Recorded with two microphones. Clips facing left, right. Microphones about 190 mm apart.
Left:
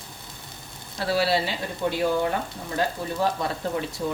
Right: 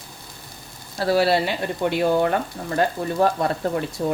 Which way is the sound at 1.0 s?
45° right (ahead or behind).